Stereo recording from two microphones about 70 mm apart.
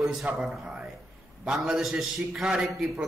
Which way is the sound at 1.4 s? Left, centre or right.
Centre.